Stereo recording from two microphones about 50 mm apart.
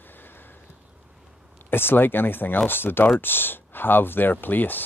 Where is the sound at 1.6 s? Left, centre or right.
Left.